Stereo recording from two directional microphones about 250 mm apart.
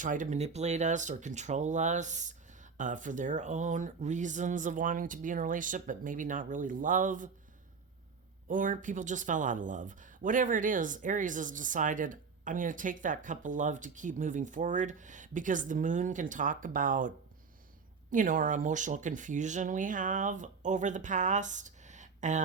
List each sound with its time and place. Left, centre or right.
0.0 s speech: right
8.4 s speech: right
18.1 s speech: right